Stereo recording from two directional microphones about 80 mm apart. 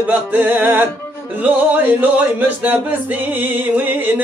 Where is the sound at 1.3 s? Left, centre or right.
Right.